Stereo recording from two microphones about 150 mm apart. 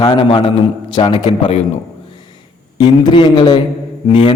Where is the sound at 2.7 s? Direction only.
30° left (ahead or behind).